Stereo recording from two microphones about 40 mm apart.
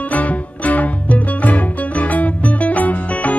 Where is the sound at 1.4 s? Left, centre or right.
Left.